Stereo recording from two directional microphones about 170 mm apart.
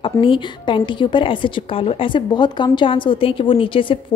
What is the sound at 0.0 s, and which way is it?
A woman's voice, 30° left (ahead or behind).